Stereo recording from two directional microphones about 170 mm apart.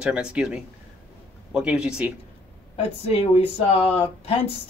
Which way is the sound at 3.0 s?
35° left (ahead or behind).